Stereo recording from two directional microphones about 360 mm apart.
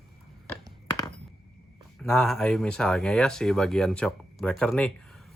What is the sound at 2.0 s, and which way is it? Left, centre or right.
Speech, centre.